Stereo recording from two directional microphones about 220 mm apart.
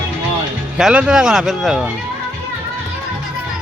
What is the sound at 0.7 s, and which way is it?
Speech, 5° right (ahead or behind).